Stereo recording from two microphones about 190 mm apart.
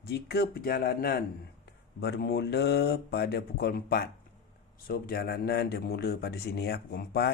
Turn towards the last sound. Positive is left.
turn(degrees=55)  # may be behind; listen again after turning